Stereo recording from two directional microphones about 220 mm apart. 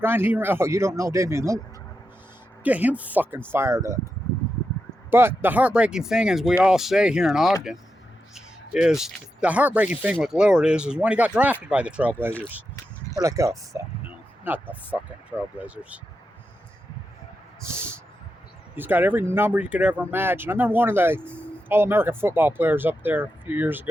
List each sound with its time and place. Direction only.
0.0 s speech: 10° right (ahead or behind)
2.6 s speech: 5° right (ahead or behind)
5.1 s speech: 10° right (ahead or behind)
13.1 s a sound: 15° right (ahead or behind)
14.9 s speech: 5° right (ahead or behind)
17.6 s a sound: 10° right (ahead or behind)
18.8 s speech: 10° right (ahead or behind)